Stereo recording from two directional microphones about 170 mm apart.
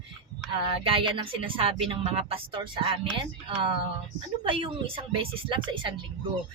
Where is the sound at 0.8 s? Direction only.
30° right (ahead or behind).